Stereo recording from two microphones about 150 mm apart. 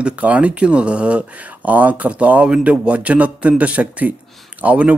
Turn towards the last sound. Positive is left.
turn(degrees=-10)  # may be behind; listen again after turning